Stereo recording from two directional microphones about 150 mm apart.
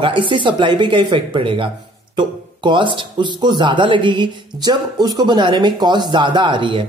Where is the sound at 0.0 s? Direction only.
35° right (ahead or behind).